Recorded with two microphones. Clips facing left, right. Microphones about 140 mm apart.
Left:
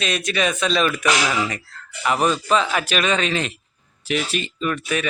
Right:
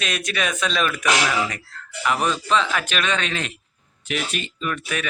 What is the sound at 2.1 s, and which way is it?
Speech, 35° left (ahead or behind).